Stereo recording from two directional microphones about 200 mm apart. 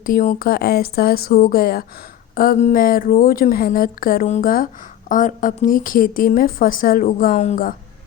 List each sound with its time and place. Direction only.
0.0 s a woman's voice: 45° left (ahead or behind)